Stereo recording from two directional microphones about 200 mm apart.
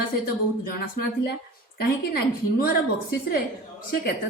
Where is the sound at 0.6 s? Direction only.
50° left (ahead or behind).